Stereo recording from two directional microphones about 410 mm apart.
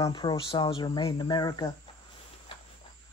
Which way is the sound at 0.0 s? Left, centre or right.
Centre.